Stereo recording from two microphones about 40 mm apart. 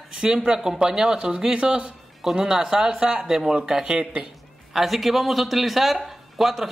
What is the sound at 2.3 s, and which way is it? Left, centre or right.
A woman's voice, centre.